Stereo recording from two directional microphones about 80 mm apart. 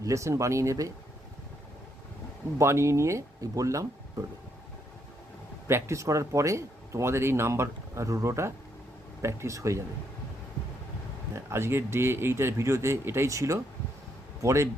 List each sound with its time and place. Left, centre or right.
0.0 s speech: right
2.6 s speech: right
5.6 s speech: right
11.3 s speech: right